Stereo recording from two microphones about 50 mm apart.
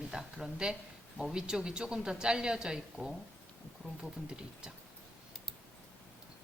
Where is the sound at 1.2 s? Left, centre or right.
Centre.